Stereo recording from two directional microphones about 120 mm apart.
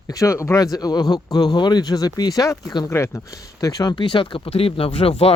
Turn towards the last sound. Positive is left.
turn(degrees=55)  # may be behind; listen again after turning